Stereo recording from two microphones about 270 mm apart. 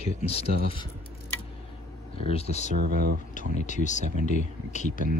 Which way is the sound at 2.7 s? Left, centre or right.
Right.